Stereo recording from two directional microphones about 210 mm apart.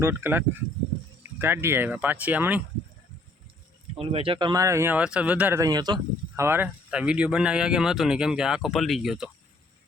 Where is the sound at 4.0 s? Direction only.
25° right (ahead or behind); by 9.3 s centre (ahead or behind).